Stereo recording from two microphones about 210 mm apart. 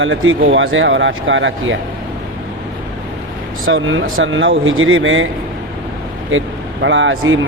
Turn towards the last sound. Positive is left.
turn(degrees=-65)  # may be behind; listen again after turning